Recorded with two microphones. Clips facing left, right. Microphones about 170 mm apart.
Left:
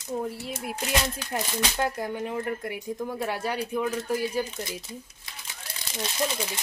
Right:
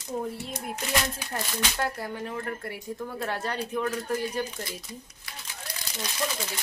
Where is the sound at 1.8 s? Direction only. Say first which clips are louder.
Left 4 dB; 20° left (ahead or behind).